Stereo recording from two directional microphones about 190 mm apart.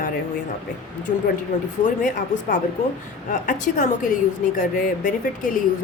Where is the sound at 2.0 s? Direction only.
45° left (ahead or behind).